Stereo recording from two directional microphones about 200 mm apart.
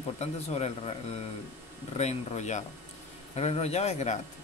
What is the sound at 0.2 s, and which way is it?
Speech, 30° left (ahead or behind).